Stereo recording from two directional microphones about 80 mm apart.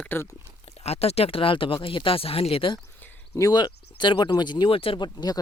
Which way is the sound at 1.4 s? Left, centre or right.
Left.